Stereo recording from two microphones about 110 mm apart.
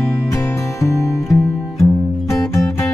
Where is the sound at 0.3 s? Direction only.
25° left (ahead or behind).